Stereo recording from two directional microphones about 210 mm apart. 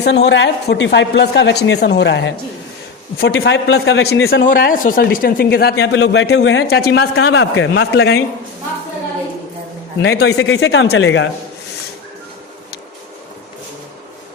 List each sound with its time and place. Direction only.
0.0 s a woman's voice: 55° left (ahead or behind)
4.4 s speech: 40° left (ahead or behind)
10.0 s a woman's voice: 50° left (ahead or behind)